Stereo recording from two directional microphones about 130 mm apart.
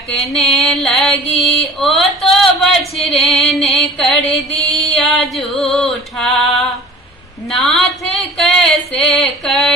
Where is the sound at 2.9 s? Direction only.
Centre (ahead or behind).